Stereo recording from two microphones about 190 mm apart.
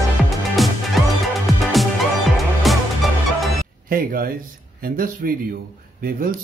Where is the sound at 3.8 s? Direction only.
50° right (ahead or behind).